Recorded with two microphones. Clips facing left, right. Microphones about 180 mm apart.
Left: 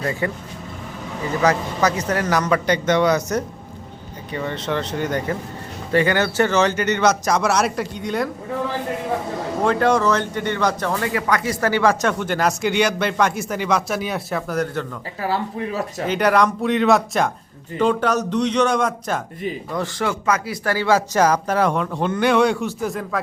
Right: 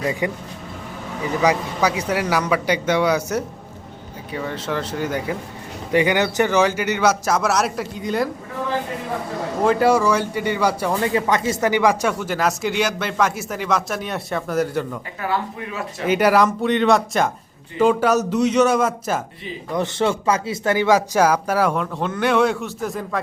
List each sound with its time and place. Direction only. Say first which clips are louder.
0.0 s speech: right 1 dB; 15° right (ahead or behind)
1.4 s speech: even; 10° right (ahead or behind)
9.6 s speech: right 1 dB; 5° right (ahead or behind)
11.0 s speech: right 3 dB; 25° right (ahead or behind); by 14.8 s 5° right (ahead or behind)
15.2 s speech: left 2 dB; 30° left (ahead or behind)
16.0 s speech: right 2 dB; 5° right (ahead or behind)
19.7 s speech: right 6 dB; 20° right (ahead or behind); by 23.2 s centre (ahead or behind)